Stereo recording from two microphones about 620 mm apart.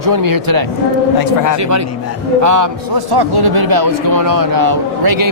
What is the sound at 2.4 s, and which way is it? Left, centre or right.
A man's voice, right.